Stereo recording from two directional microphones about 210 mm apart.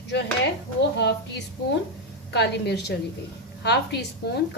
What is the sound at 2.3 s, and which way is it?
A woman's voice, 55° left (ahead or behind).